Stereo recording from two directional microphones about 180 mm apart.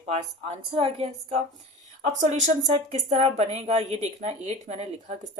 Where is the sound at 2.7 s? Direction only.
35° right (ahead or behind).